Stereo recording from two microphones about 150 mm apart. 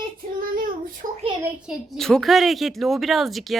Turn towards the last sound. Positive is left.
turn(degrees=0)  # may be behind; listen again after turning